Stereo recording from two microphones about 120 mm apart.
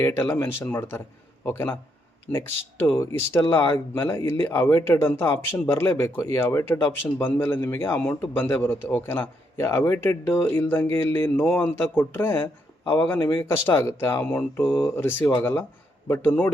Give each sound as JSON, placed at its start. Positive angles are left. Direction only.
{"t": 0.0, "sound": "speech", "side_deg": 20}